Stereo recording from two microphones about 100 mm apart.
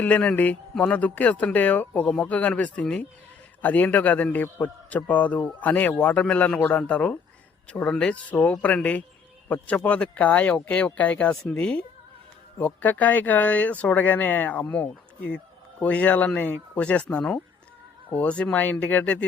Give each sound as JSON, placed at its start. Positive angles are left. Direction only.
{"t": 0.0, "sound": "speech", "side_deg": 15}